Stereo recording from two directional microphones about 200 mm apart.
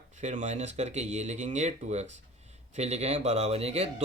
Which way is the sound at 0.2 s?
35° right (ahead or behind).